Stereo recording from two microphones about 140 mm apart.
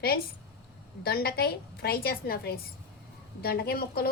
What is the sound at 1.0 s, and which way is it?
A woman's voice, 90° left.